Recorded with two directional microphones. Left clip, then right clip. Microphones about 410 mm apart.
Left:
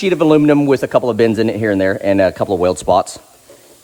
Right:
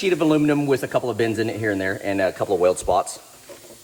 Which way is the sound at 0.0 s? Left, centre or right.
Left.